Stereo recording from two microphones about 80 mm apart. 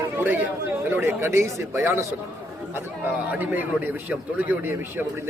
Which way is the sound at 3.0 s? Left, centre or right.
Right.